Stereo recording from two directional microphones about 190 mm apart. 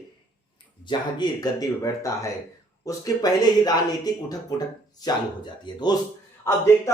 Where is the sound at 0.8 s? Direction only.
20° left (ahead or behind).